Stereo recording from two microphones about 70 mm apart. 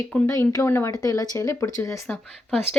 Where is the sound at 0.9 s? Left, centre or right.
Left.